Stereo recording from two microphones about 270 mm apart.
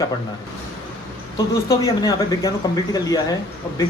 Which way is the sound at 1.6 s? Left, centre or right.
Centre.